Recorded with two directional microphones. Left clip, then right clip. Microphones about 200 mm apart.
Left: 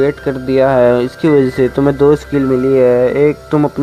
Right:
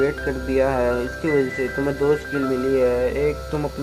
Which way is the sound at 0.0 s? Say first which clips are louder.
Left 7 dB; 35° left (ahead or behind).